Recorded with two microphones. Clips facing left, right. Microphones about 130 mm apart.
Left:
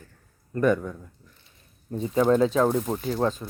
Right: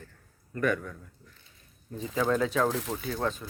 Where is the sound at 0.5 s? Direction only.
30° left (ahead or behind).